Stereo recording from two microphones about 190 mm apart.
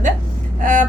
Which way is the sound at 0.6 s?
45° right (ahead or behind).